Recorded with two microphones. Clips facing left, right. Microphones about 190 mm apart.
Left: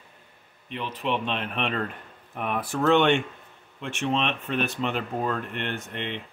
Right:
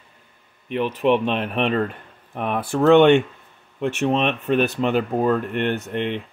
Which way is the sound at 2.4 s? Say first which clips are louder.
Right 5 dB; 30° right (ahead or behind).